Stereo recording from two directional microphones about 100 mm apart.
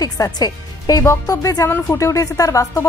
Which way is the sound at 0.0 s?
40° left (ahead or behind).